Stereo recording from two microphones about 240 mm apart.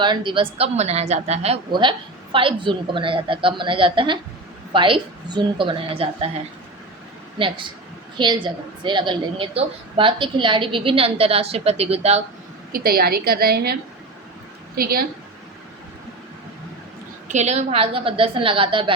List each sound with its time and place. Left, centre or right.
0.0 s a woman's voice: centre
7.3 s a woman's voice: right
12.7 s a woman's voice: right
14.8 s a woman's voice: right
17.2 s a woman's voice: right